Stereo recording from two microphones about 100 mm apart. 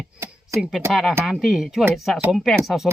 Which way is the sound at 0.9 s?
Centre (ahead or behind).